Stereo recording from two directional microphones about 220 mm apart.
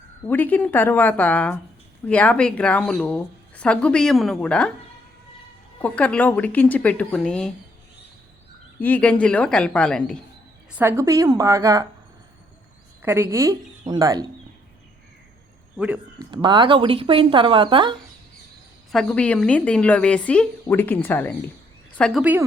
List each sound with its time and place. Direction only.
0.3 s speech: 10° left (ahead or behind)
5.8 s speech: 5° left (ahead or behind)
8.8 s speech: 5° left (ahead or behind)
10.7 s speech: 10° right (ahead or behind)
13.0 s speech: 10° right (ahead or behind)
16.3 s speech: 20° right (ahead or behind)
18.9 s speech: 5° left (ahead or behind)